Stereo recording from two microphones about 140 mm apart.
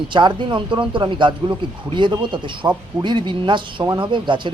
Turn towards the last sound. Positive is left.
turn(degrees=-35)  # may be behind; listen again after turning